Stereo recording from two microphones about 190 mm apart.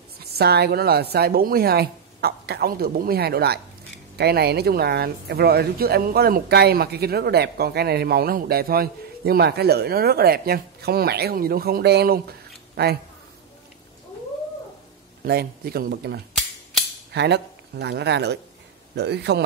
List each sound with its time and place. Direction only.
0.2 s speech: 55° right (ahead or behind)
15.2 s speech: 55° right (ahead or behind)